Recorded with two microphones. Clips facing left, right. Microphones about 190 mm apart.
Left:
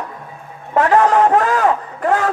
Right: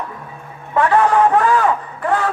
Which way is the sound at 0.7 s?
40° left (ahead or behind).